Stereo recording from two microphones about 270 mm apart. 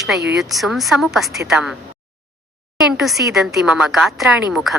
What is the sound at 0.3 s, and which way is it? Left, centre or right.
A woman's voice, centre.